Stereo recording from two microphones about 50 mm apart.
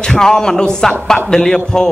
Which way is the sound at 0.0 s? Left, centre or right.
Centre.